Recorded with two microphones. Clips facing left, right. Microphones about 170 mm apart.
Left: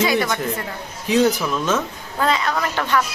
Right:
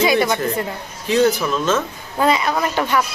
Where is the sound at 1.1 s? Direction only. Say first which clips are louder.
Right 1 dB; 5° left (ahead or behind).